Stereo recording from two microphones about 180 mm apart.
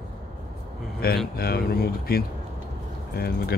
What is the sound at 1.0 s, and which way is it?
A man's voice, 60° left (ahead or behind).